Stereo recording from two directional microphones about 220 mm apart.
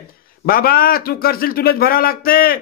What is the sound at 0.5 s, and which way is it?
A man's voice, 40° left (ahead or behind).